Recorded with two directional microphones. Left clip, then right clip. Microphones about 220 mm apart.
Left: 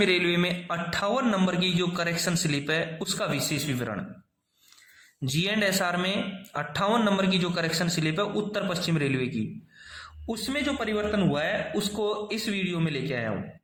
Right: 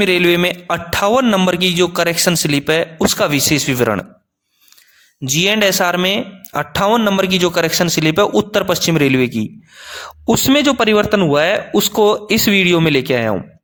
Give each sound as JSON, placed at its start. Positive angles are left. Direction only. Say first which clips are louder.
{"t": 0.0, "sound": "a man's voice", "louder": "right 11 dB", "side_deg": -35}
{"t": 5.2, "sound": "a man's voice", "louder": "right 13 dB", "side_deg": -40}